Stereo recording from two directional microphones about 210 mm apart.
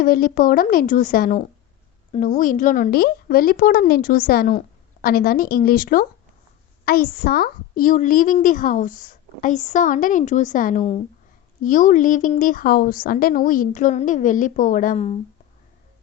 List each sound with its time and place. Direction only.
0.0 s a woman's voice: 45° left (ahead or behind)